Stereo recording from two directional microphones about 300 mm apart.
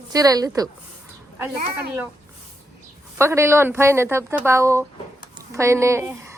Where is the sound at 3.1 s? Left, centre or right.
Centre.